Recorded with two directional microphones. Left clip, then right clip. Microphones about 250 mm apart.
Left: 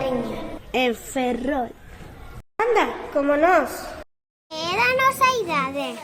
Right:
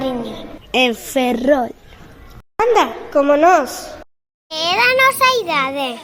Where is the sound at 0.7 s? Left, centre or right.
Right.